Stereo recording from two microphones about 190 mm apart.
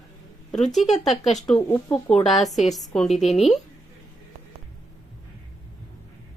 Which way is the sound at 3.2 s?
35° left (ahead or behind).